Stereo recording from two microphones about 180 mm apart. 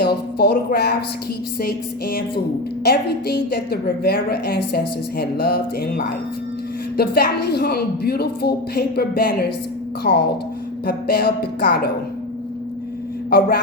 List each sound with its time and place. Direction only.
0.0 s a woman's voice: 60° left (ahead or behind)